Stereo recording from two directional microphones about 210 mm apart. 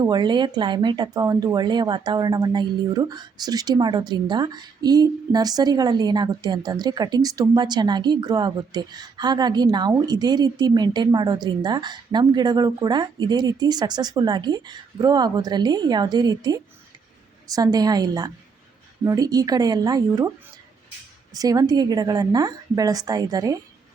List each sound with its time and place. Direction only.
0.0 s a woman's voice: 20° right (ahead or behind)
21.3 s a woman's voice: 15° right (ahead or behind)